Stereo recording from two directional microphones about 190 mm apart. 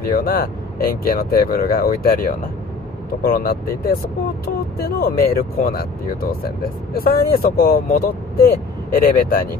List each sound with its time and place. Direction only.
0.0 s speech: 50° left (ahead or behind)
6.9 s speech: 50° left (ahead or behind)